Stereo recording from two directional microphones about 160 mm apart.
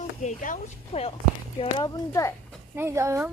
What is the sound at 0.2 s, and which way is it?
Speech, 50° left (ahead or behind).